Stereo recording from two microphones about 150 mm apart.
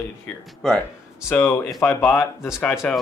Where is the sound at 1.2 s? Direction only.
15° left (ahead or behind).